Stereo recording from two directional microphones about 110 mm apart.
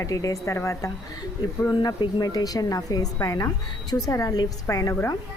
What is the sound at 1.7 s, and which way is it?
A woman's voice, 40° left (ahead or behind).